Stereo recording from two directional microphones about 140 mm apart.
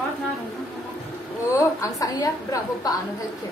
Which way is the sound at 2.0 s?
25° left (ahead or behind).